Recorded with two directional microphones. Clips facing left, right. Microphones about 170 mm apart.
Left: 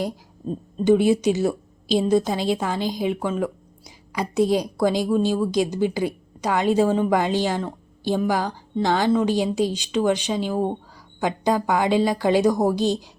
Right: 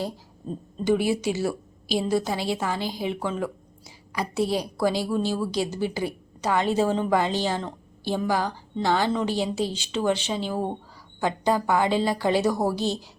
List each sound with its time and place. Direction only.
0.9 s a woman's voice: 20° left (ahead or behind)